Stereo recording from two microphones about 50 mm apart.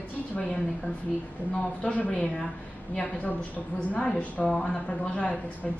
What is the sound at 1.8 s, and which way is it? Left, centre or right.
Speech, left.